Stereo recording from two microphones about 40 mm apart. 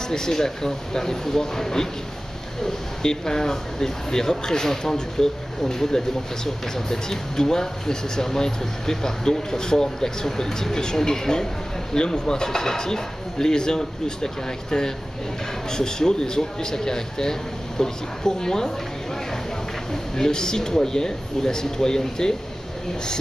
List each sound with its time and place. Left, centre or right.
0.1 s speech: centre
19.9 s speech: centre